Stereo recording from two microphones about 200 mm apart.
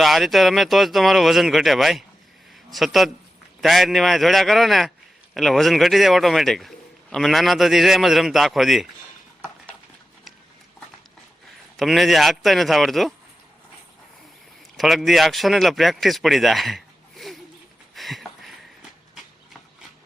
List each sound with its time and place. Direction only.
0.0 s a man's voice: centre (ahead or behind)
11.8 s a man's voice: centre (ahead or behind)
14.8 s speech: centre (ahead or behind)
17.9 s a sound: centre (ahead or behind)